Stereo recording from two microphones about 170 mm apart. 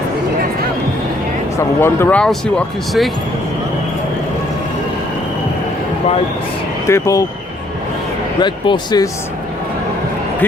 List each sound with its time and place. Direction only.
1.5 s speech: 15° left (ahead or behind)
6.8 s speech: 15° left (ahead or behind)
8.4 s speech: 25° left (ahead or behind)